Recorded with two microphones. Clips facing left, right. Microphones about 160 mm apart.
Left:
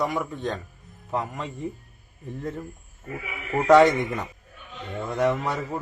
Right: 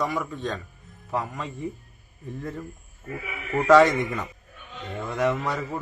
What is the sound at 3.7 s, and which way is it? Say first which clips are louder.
Speech: left 1 dB; 25° left (ahead or behind).